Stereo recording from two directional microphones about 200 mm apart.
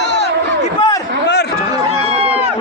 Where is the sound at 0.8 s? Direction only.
20° left (ahead or behind).